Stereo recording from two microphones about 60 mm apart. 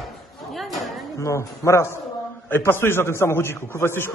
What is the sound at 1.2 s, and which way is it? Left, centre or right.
Speech, left.